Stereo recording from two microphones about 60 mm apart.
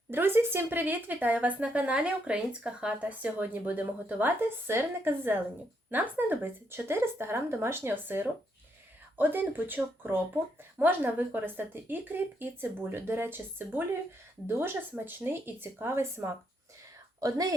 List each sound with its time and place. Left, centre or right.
0.1 s a woman's voice: right
17.2 s speech: right